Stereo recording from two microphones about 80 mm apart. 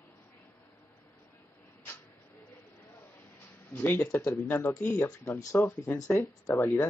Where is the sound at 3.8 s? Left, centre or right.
Left.